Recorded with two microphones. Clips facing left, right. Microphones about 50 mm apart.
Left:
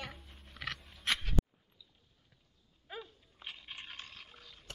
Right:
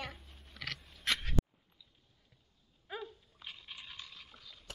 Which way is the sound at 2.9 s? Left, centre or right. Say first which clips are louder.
Right 3 dB; centre.